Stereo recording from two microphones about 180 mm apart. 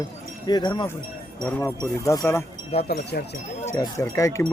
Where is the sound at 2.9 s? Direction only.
65° left (ahead or behind).